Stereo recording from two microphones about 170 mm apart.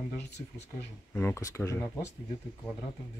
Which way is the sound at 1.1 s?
15° left (ahead or behind).